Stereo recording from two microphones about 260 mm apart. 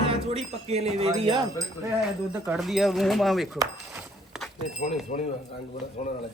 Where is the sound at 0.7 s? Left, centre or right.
Right.